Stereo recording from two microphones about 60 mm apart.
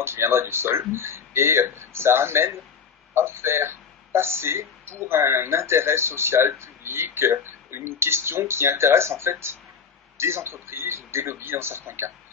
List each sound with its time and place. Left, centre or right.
0.0 s speech: right